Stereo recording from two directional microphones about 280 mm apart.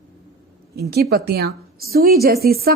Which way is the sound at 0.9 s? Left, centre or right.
Right.